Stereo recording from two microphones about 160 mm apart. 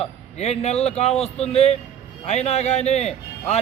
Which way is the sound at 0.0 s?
40° left (ahead or behind).